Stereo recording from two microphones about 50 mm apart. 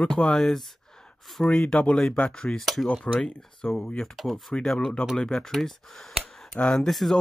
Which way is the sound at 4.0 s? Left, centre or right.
Centre.